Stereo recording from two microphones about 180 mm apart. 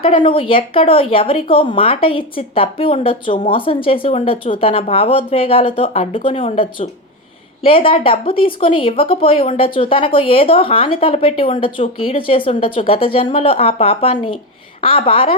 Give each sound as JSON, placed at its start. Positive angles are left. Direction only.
{"t": 0.0, "sound": "speech", "side_deg": 30}